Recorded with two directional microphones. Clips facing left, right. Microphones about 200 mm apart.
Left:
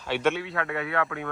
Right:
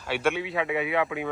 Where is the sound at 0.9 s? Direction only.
25° right (ahead or behind).